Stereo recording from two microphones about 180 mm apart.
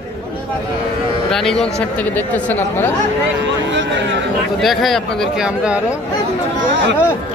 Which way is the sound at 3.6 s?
90° right.